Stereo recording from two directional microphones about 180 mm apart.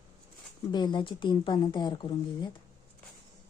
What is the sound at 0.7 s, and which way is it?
Speech, 25° left (ahead or behind).